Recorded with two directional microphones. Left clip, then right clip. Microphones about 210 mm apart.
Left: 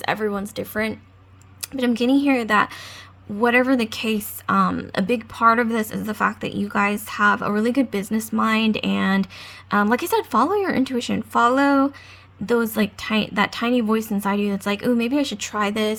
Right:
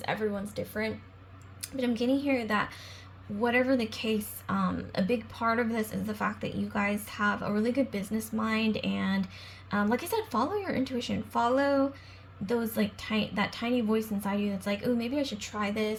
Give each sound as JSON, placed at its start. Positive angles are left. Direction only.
{"t": 0.0, "sound": "speech", "side_deg": 35}